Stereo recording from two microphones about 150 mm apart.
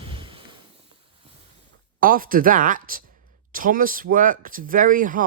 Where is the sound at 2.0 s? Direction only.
70° right (ahead or behind).